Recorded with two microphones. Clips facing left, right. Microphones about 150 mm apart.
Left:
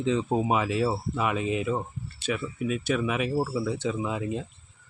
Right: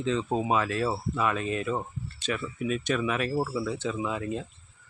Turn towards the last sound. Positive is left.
turn(degrees=10)  # may be behind; listen again after turning